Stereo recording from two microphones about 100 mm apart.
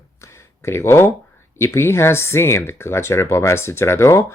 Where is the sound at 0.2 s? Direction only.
30° left (ahead or behind).